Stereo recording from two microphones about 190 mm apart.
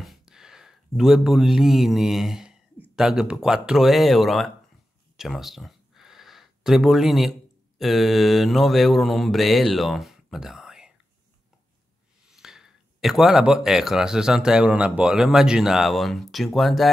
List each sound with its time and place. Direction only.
0.0 s speech: centre (ahead or behind)
5.1 s a sound: centre (ahead or behind)
7.8 s speech: centre (ahead or behind)
12.3 s speech: centre (ahead or behind)